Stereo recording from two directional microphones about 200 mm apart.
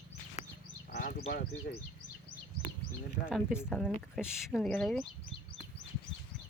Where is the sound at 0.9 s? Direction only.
45° left (ahead or behind).